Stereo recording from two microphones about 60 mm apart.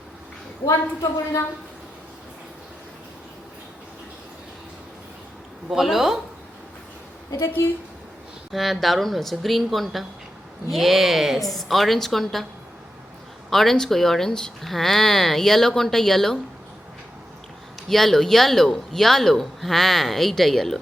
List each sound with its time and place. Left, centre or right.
5.7 s speech: centre
7.3 s a woman's voice: left
8.5 s speech: centre
13.5 s speech: centre
17.8 s speech: centre